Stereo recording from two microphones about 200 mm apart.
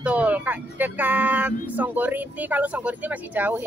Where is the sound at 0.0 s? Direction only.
5° right (ahead or behind).